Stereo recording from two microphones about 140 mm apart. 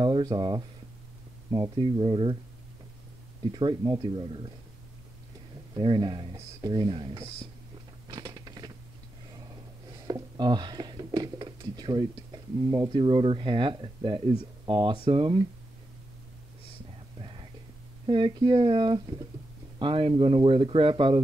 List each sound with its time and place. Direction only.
0.0 s speech: 35° right (ahead or behind)
3.5 s speech: 30° right (ahead or behind)
5.8 s speech: 35° right (ahead or behind)
8.1 s a sound: 30° right (ahead or behind)
10.0 s a sound: 30° right (ahead or behind)
12.7 s speech: 35° right (ahead or behind)
17.2 s whispering: 40° right (ahead or behind)
18.0 s speech: 35° right (ahead or behind)